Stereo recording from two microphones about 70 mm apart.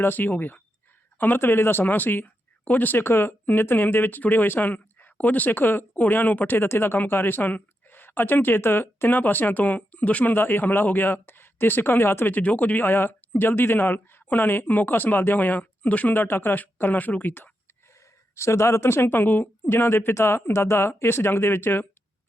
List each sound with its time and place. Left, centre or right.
0.0 s speech: left
18.3 s speech: left
19.6 s speech: left